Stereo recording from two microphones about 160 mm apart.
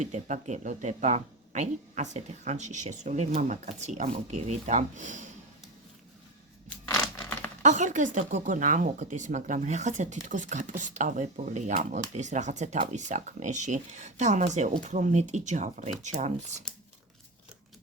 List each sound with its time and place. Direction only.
0.0 s speech: 50° right (ahead or behind)
6.9 s crumpling: 15° left (ahead or behind)
7.6 s speech: 50° right (ahead or behind)